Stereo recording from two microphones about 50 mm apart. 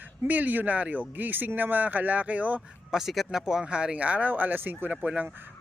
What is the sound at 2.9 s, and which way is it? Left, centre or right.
A man's voice, centre.